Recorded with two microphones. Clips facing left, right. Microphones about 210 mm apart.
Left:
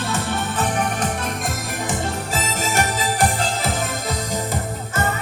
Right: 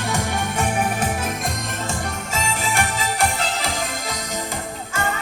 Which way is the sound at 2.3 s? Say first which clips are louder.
Right 2 dB; 40° left (ahead or behind).